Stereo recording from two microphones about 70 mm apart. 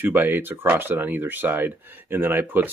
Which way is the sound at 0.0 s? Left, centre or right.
Right.